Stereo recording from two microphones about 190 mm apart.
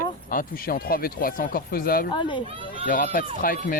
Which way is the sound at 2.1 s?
25° left (ahead or behind).